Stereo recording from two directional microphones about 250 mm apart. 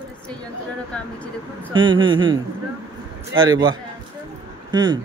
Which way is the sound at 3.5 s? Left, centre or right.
Centre.